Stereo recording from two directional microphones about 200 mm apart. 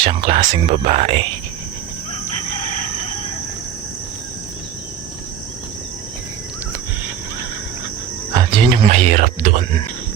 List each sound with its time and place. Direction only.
0.0 s speech: 25° right (ahead or behind)
8.3 s speech: 20° right (ahead or behind)